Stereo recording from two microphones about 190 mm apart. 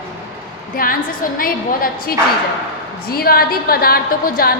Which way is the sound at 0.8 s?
50° left (ahead or behind).